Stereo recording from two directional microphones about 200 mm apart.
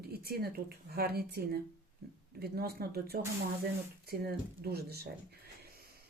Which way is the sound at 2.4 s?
50° right (ahead or behind).